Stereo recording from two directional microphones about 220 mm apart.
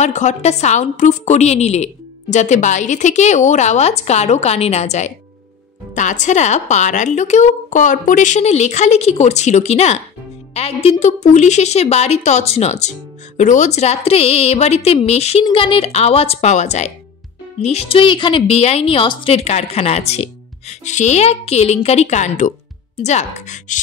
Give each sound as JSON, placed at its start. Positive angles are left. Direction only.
{"t": 0.0, "sound": "a woman's voice", "side_deg": 35}